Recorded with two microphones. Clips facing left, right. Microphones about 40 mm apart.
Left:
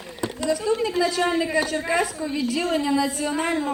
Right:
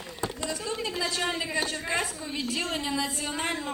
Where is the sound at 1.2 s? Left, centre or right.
Left.